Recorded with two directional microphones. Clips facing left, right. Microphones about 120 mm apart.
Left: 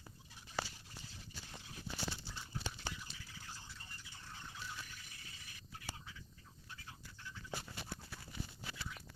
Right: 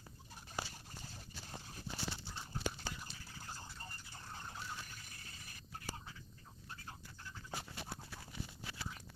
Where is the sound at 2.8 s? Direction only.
45° right (ahead or behind).